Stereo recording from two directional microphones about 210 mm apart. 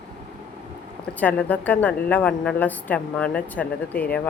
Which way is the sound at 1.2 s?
10° left (ahead or behind).